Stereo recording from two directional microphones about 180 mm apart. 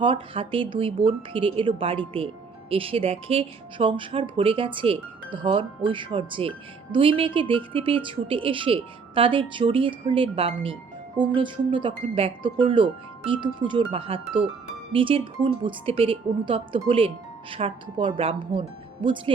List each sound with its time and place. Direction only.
0.0 s speech: 30° right (ahead or behind)